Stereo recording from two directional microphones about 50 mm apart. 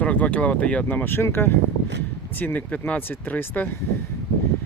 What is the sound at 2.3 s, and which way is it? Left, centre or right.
Speech, left.